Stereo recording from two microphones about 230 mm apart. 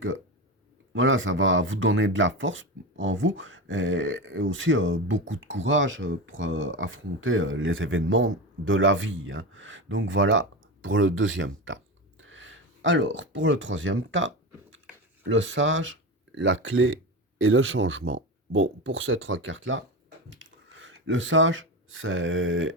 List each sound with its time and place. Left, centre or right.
0.9 s speech: right
12.2 s a sound: right
15.2 s speech: right